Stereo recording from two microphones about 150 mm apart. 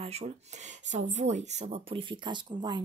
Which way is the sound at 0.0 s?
45° right (ahead or behind).